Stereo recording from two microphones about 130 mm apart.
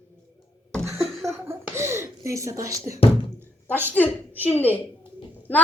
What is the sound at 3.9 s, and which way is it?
Speech, 15° left (ahead or behind).